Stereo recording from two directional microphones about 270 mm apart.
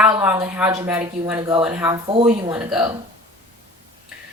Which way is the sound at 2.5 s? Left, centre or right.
Centre.